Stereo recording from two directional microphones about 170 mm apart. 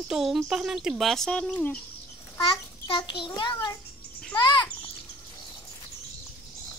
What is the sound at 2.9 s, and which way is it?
Speech, 30° left (ahead or behind).